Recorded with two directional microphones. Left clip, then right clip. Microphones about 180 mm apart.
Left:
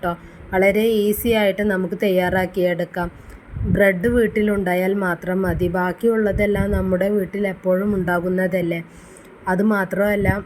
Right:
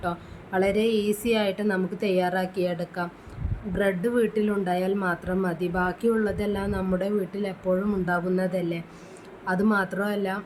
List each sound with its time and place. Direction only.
0.0 s speech: 20° left (ahead or behind)